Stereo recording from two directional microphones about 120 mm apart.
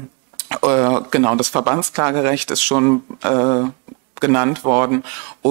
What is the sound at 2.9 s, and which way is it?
Speech, 25° right (ahead or behind).